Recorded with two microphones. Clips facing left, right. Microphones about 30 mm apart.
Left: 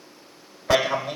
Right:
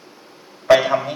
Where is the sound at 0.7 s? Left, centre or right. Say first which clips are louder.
Right 7 dB; centre.